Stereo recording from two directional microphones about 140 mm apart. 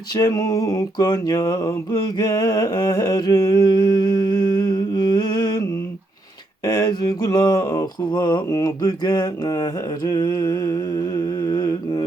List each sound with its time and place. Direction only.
0.1 s mantra: 25° left (ahead or behind)
2.0 s humming: 30° left (ahead or behind)
6.7 s mantra: 30° left (ahead or behind)